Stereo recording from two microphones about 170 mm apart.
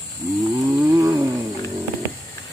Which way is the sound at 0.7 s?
20° right (ahead or behind).